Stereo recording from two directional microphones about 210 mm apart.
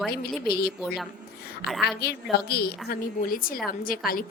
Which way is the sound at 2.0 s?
50° left (ahead or behind).